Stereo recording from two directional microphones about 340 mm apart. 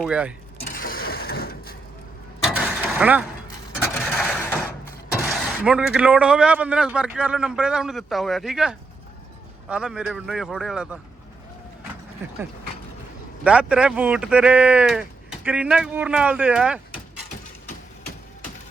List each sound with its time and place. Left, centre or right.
0.0 s speech: centre
0.6 s mechanisms: left
2.4 s mechanisms: centre
5.2 s speech: centre
13.4 s speech: centre